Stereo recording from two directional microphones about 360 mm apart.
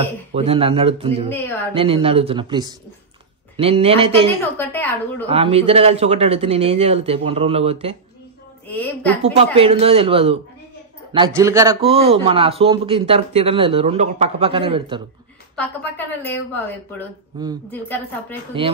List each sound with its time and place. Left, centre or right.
0.0 s a man's voice: centre
1.3 s speech: centre
1.7 s a man's voice: centre
5.3 s a man's voice: centre
8.6 s a woman's voice: centre
9.2 s a man's voice: centre
15.5 s a woman's voice: centre
18.5 s a man's voice: centre